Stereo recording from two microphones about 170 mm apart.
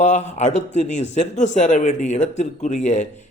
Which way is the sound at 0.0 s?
45° left (ahead or behind).